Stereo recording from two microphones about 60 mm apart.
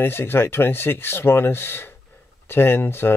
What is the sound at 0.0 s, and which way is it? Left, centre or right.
Speech, left.